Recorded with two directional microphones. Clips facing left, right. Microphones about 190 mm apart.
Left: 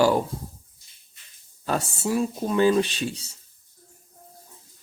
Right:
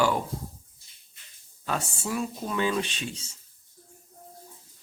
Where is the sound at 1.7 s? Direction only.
35° left (ahead or behind).